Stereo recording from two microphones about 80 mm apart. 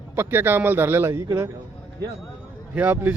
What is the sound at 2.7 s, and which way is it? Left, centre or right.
Speech, right.